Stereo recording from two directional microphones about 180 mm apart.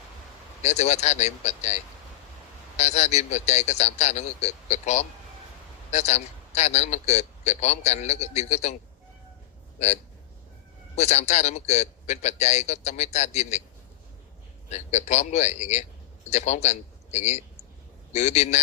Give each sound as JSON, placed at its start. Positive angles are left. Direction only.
{"t": 0.6, "sound": "a man's voice", "side_deg": 40}
{"t": 14.7, "sound": "a man's voice", "side_deg": 40}